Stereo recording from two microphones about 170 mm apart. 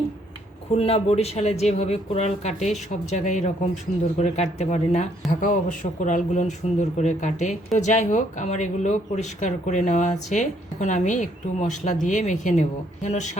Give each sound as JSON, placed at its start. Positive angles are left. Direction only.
{"t": 0.8, "sound": "speech", "side_deg": 35}